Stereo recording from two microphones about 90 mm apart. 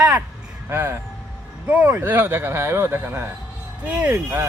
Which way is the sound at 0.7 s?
30° right (ahead or behind).